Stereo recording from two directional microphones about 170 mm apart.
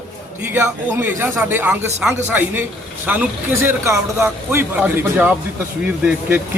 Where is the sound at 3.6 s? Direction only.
15° right (ahead or behind).